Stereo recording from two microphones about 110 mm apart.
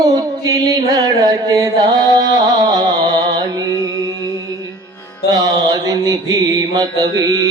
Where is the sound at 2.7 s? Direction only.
35° right (ahead or behind).